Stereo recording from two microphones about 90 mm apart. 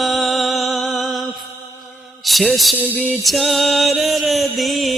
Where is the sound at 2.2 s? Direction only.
Centre (ahead or behind).